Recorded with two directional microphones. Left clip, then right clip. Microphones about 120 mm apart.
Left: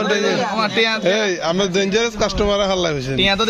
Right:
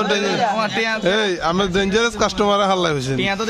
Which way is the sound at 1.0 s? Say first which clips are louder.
Left 1 dB; 35° right (ahead or behind).